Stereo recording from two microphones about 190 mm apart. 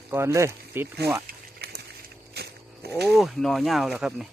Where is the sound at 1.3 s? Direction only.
55° right (ahead or behind).